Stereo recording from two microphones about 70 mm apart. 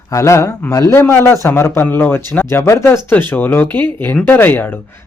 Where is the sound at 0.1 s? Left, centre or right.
Left.